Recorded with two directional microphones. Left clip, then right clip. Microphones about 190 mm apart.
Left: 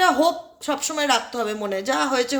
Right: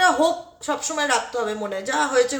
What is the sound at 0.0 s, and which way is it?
A woman's voice, 35° left (ahead or behind).